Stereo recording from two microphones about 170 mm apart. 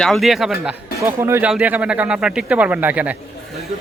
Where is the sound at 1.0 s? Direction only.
15° right (ahead or behind).